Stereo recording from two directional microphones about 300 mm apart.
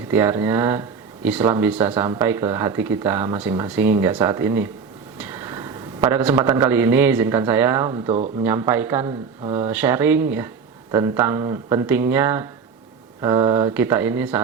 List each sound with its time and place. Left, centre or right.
0.1 s a man's voice: centre
8.4 s speech: centre
9.4 s speech: right
9.6 s speech: centre